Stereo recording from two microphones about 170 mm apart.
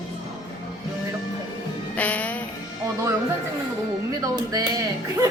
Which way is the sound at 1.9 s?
10° left (ahead or behind).